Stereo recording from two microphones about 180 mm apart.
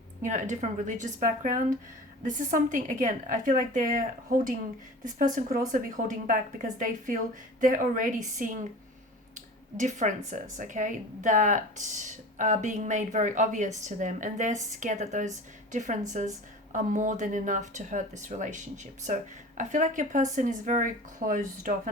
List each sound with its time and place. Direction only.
0.2 s speech: 45° right (ahead or behind)
9.7 s speech: 45° right (ahead or behind)